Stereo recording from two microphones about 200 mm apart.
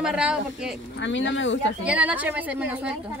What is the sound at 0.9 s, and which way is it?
Speech, 65° left (ahead or behind).